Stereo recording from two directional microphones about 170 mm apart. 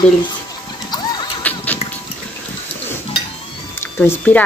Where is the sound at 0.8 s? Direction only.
25° left (ahead or behind).